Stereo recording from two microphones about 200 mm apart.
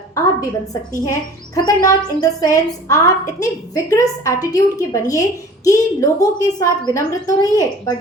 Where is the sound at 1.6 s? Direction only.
15° left (ahead or behind).